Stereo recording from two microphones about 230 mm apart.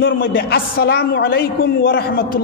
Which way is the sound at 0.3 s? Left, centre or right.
Left.